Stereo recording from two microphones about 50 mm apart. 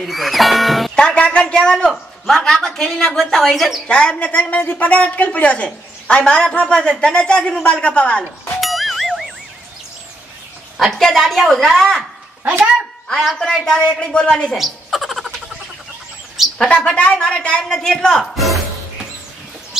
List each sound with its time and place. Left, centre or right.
0.0 s music: centre
0.9 s a sound: left
2.2 s a woman's voice: centre
3.8 s a woman's voice: left
4.6 s a woman's voice: left
8.5 s music: centre
10.8 s a woman's voice: centre
13.4 s a woman's voice: centre
14.6 s a sound: centre
16.5 s a woman's voice: left
18.2 s a woman's voice: centre